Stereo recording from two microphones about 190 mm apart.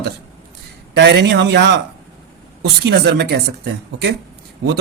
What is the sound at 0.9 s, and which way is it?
Speech, 60° right (ahead or behind).